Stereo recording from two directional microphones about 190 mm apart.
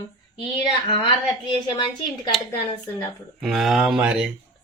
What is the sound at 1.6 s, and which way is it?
Speech, 25° left (ahead or behind).